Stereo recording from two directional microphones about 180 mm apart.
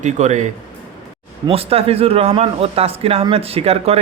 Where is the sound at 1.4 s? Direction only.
35° right (ahead or behind).